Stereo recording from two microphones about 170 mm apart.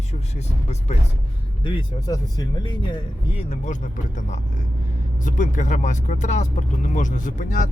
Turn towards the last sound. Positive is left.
turn(degrees=50)  # may be behind; listen again after turning